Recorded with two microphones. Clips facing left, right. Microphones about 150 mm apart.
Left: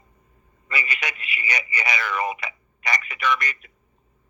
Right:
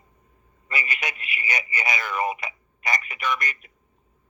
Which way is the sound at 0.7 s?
45° right (ahead or behind).